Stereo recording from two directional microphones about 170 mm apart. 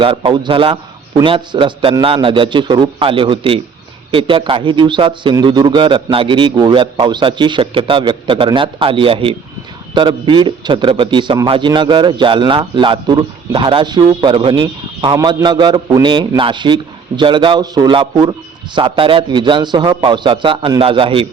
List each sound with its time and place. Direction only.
0.0 s a man's voice: 30° right (ahead or behind)